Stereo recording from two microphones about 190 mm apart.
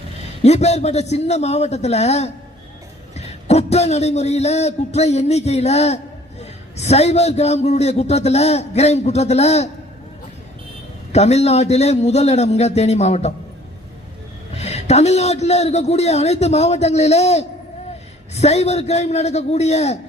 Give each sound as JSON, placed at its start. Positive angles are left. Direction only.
{"t": 0.4, "sound": "a man's voice", "side_deg": 35}
{"t": 11.1, "sound": "a man's voice", "side_deg": 35}
{"t": 14.5, "sound": "a man's voice", "side_deg": 35}